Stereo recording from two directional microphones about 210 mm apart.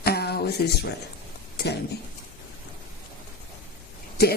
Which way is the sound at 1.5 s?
50° left (ahead or behind).